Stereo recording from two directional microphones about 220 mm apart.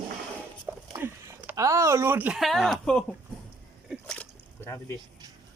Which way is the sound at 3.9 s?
5° left (ahead or behind).